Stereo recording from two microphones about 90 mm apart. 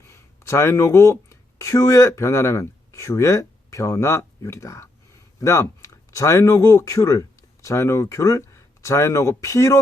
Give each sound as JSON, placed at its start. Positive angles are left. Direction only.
{"t": 0.1, "sound": "speech", "side_deg": 30}